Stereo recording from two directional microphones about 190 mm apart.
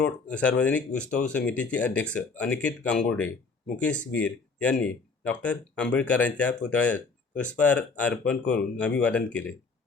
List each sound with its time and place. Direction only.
0.0 s speech: 5° left (ahead or behind)